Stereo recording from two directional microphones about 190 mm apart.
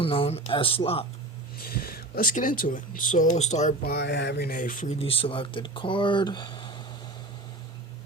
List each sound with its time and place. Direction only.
0.0 s speech: 30° left (ahead or behind)
1.6 s speech: 50° left (ahead or behind); by 3.8 s 35° left (ahead or behind)
3.8 s speech: 60° left (ahead or behind)
4.9 s speech: 30° left (ahead or behind)